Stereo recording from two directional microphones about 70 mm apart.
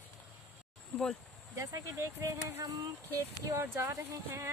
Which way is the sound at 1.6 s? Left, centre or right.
Right.